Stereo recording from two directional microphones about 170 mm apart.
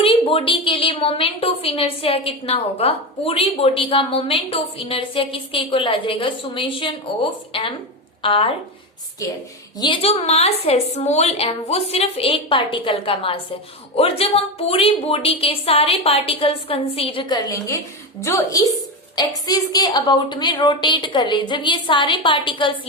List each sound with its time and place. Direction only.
0.0 s a woman's voice: 35° left (ahead or behind)
9.2 s a woman's voice: 20° left (ahead or behind)